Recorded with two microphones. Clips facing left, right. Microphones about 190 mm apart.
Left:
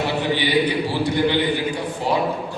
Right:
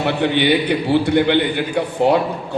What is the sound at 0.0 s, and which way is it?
A man's voice, 60° right (ahead or behind).